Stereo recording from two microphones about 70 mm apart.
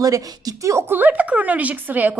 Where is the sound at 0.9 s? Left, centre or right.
Right.